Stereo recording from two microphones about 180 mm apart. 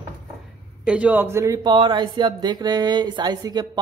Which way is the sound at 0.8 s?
5° right (ahead or behind).